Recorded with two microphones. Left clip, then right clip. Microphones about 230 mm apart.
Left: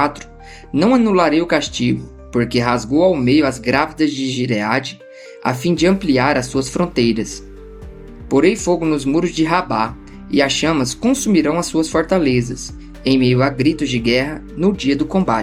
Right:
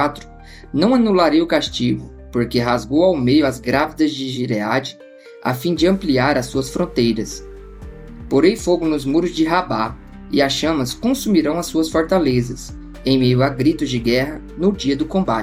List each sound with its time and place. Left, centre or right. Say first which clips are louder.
0.8 s speech: left 1 dB; left
8.3 s speech: left 1 dB; left